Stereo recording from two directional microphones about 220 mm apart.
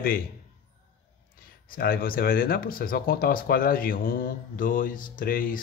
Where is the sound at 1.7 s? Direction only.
40° left (ahead or behind).